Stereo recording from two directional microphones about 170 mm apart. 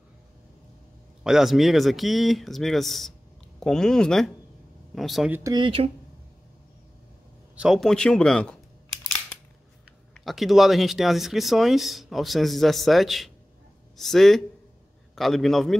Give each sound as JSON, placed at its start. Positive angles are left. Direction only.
{"t": 1.2, "sound": "speech", "side_deg": 0}
{"t": 5.3, "sound": "speech", "side_deg": -20}
{"t": 7.5, "sound": "speech", "side_deg": -5}
{"t": 10.1, "sound": "speech", "side_deg": 0}